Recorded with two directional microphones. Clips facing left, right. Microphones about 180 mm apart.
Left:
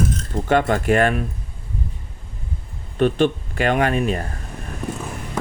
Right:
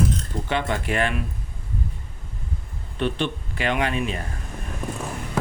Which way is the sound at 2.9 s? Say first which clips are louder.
Left 8 dB; 45° left (ahead or behind).